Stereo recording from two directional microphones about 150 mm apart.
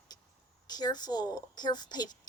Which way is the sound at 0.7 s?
25° left (ahead or behind).